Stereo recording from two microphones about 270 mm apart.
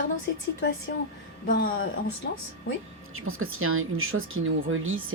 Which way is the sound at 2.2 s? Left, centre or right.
Left.